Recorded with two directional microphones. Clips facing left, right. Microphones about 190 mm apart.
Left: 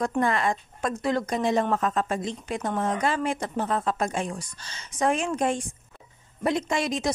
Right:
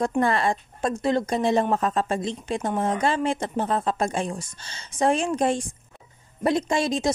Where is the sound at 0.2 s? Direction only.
35° right (ahead or behind).